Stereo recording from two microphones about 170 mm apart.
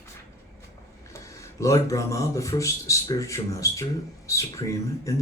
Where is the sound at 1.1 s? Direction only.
15° left (ahead or behind).